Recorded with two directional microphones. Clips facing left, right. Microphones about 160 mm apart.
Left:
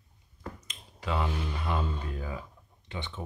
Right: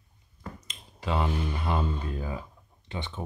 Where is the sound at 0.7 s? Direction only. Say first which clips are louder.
Right 3 dB; 30° right (ahead or behind).